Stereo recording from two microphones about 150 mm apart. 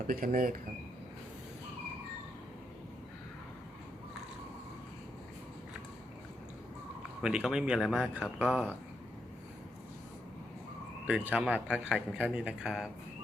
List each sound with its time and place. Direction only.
0.1 s speech: 70° right (ahead or behind)
7.2 s speech: 5° right (ahead or behind)
11.0 s a man's voice: 10° right (ahead or behind)